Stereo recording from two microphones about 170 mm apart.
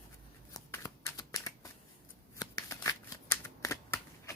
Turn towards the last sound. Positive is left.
turn(degrees=15)  # may be behind; listen again after turning